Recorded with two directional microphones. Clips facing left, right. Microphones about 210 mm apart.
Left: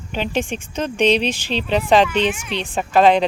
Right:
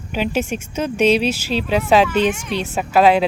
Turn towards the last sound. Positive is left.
turn(degrees=-5)  # may be behind; listen again after turning